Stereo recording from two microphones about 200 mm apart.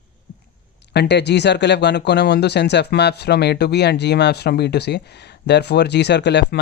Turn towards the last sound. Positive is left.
turn(degrees=60)  # may be behind; listen again after turning